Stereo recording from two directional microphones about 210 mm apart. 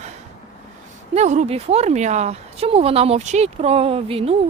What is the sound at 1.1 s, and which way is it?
Speech, 35° right (ahead or behind).